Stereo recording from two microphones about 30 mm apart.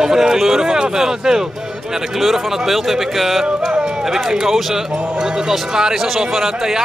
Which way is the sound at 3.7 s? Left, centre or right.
Right.